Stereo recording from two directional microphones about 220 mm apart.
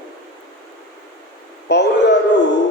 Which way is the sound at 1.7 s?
50° left (ahead or behind).